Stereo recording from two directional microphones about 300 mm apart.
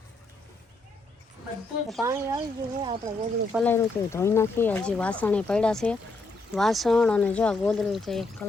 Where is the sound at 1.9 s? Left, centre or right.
Centre.